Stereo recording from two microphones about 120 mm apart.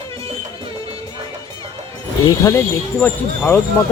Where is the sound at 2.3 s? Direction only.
30° left (ahead or behind).